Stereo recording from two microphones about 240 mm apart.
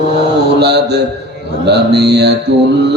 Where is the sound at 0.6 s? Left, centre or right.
Right.